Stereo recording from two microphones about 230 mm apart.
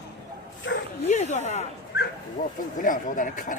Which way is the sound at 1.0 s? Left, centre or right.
Left.